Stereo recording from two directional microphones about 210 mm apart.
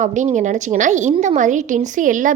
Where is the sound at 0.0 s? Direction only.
35° right (ahead or behind).